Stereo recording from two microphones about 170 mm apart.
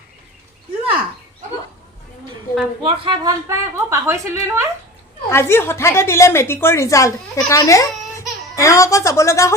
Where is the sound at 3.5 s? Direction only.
15° right (ahead or behind).